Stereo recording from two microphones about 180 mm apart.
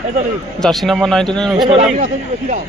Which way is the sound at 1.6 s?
35° right (ahead or behind).